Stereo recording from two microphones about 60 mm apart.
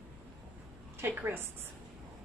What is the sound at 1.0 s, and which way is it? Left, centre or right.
Speech, right.